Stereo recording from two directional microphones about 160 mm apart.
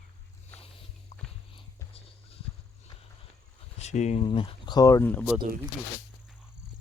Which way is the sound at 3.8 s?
45° left (ahead or behind).